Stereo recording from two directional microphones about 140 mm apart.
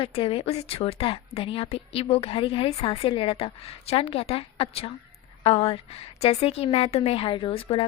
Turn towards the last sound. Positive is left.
turn(degrees=45)  # may be behind; listen again after turning